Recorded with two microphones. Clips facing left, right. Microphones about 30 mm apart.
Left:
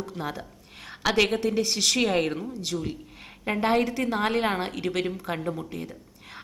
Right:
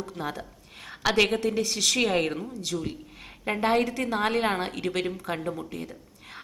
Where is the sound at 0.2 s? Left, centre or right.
Centre.